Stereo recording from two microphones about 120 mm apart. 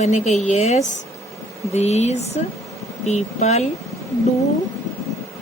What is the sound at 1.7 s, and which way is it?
Speech, 65° left (ahead or behind).